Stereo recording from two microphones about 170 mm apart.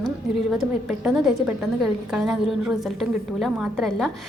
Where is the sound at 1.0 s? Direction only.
5° right (ahead or behind).